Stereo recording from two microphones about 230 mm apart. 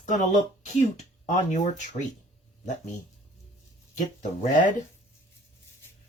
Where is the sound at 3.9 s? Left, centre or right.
Left.